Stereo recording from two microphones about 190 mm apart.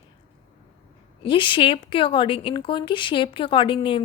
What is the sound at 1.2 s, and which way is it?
A woman's voice, 25° left (ahead or behind).